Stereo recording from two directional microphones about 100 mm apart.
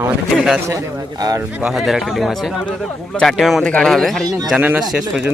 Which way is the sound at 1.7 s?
Centre (ahead or behind).